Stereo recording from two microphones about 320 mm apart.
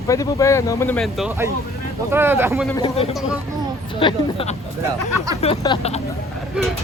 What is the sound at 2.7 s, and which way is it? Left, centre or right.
Speech, centre.